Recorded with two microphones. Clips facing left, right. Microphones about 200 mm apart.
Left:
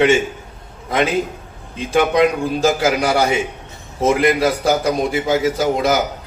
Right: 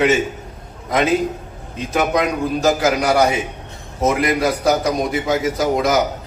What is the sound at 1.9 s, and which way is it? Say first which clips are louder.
A man's voice: left 4 dB; 30° left (ahead or behind).